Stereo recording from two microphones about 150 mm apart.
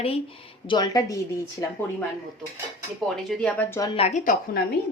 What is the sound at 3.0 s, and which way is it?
Speech, 5° left (ahead or behind).